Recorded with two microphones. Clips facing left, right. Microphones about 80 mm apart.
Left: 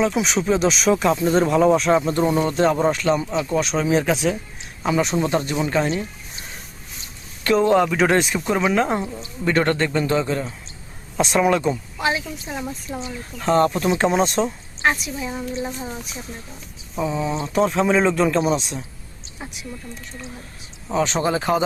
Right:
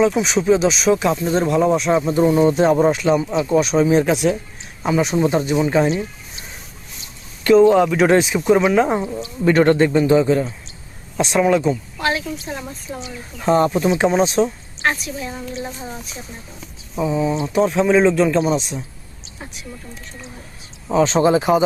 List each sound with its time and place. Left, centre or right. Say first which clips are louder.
0.0 s speech: right 4 dB; centre
9.4 s speech: right 6 dB; centre
11.2 s speech: right 2 dB; centre
13.4 s speech: right 2 dB; centre
14.8 s speech: even; centre
20.8 s speech: right 6 dB; centre